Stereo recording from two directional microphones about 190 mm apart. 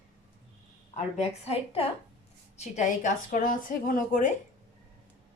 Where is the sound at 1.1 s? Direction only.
35° left (ahead or behind).